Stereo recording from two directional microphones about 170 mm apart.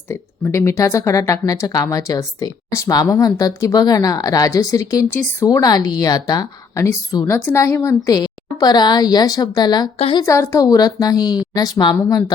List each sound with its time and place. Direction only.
0.1 s speech: 15° left (ahead or behind); by 10.2 s 30° left (ahead or behind)
10.2 s speech: 15° left (ahead or behind)